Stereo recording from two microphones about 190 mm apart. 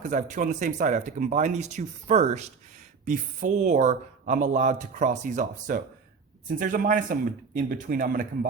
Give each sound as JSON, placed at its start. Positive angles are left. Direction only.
{"t": 0.0, "sound": "speech", "side_deg": -40}